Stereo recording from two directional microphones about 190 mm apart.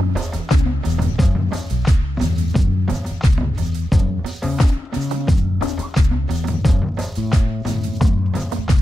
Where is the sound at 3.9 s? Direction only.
Centre (ahead or behind).